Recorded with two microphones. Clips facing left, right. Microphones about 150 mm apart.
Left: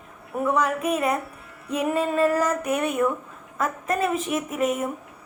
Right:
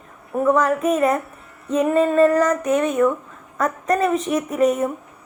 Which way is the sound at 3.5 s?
5° left (ahead or behind).